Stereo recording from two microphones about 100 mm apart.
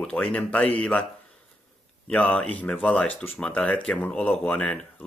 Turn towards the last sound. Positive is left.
turn(degrees=15)  # may be behind; listen again after turning